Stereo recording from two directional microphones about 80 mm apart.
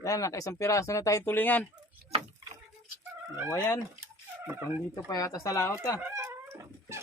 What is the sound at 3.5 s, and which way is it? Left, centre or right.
Fowl, left.